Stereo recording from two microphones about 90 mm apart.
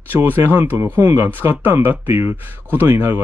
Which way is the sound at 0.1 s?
25° right (ahead or behind).